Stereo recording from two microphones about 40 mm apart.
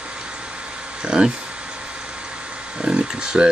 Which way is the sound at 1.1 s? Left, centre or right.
Right.